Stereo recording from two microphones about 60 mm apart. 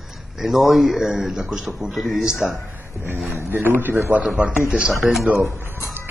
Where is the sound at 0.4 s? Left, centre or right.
Centre.